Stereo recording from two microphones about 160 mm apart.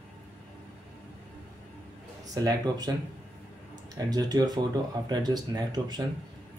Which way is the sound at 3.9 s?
25° right (ahead or behind).